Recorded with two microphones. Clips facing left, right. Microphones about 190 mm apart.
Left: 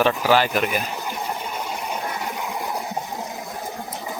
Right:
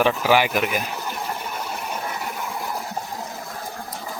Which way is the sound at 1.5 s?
10° left (ahead or behind).